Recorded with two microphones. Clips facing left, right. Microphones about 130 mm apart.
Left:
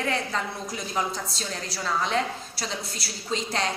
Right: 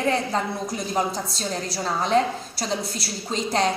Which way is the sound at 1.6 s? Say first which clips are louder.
Right 1 dB; 45° right (ahead or behind).